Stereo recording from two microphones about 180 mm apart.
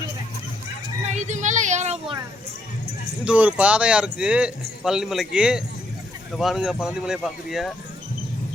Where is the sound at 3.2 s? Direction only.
10° right (ahead or behind).